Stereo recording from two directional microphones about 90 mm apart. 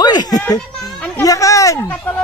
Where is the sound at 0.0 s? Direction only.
50° left (ahead or behind).